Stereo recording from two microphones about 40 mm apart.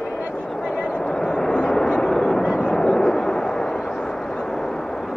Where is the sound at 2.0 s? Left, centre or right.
Centre.